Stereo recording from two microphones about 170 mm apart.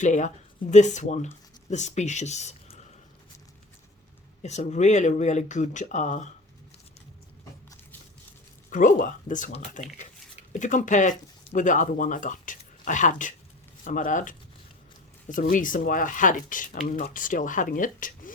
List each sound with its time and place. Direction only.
0.0 s speech: 45° left (ahead or behind)
4.4 s speech: 40° left (ahead or behind)
8.7 s speech: 50° left (ahead or behind)